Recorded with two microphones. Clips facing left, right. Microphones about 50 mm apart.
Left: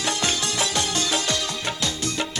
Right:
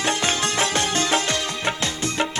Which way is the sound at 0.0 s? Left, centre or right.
Right.